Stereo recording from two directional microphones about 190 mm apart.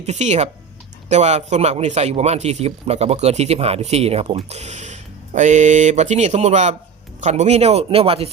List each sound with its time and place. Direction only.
0.0 s a man's voice: 35° right (ahead or behind)